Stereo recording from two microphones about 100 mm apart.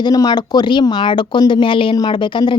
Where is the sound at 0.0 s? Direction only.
40° left (ahead or behind).